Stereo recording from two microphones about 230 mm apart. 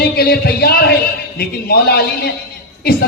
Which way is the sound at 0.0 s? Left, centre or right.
Left.